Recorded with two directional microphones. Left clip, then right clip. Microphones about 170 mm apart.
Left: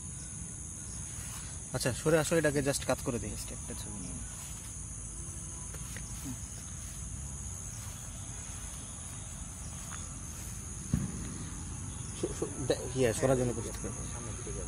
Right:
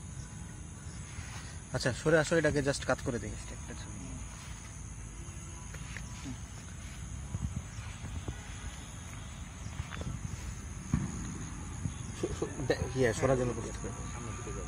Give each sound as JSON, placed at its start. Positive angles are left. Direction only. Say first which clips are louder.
{"t": 1.7, "sound": "speech", "louder": "right 1 dB", "side_deg": 0}
{"t": 12.2, "sound": "a sound", "louder": "even", "side_deg": -10}
{"t": 13.2, "sound": "speech", "louder": "even", "side_deg": 20}